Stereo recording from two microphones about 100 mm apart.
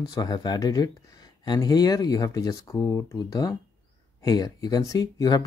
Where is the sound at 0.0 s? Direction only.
45° left (ahead or behind).